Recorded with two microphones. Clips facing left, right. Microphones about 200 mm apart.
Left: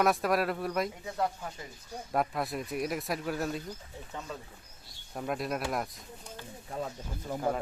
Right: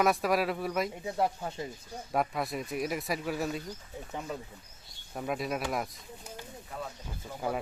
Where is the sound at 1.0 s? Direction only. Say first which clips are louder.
Right 3 dB; 25° right (ahead or behind).